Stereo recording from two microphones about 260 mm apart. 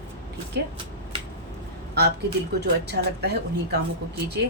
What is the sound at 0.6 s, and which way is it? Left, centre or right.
Speech, right.